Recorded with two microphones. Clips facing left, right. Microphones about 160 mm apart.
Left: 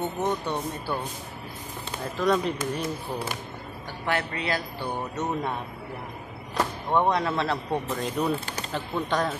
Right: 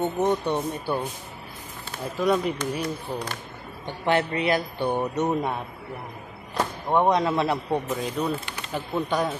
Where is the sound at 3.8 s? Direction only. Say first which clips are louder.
Right 5 dB; 20° right (ahead or behind).